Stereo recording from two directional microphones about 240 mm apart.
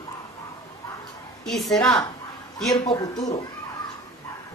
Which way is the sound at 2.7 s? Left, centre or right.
Centre.